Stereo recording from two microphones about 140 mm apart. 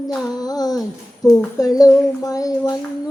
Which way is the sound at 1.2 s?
25° left (ahead or behind).